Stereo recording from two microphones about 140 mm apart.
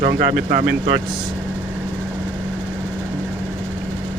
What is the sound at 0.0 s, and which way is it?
Speech, 90° right.